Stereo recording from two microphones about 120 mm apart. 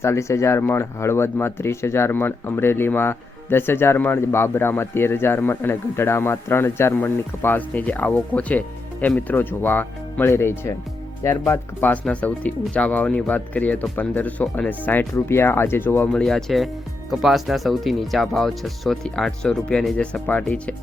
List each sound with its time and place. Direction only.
0.0 s speech: 25° left (ahead or behind)
16.1 s speech: 5° left (ahead or behind)